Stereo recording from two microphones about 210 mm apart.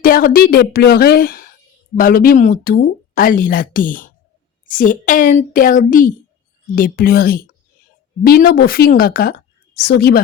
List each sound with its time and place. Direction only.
0.0 s speech: 40° left (ahead or behind)